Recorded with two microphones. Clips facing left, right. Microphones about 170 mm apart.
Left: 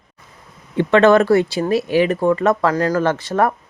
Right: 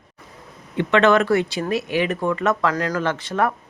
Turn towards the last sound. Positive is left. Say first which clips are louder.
# left 4 dB
turn(degrees=40)  # may be behind; listen again after turning